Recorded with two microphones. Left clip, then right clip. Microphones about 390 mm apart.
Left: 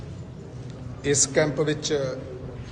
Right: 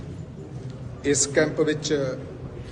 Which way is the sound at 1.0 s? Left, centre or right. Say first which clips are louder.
Even; centre.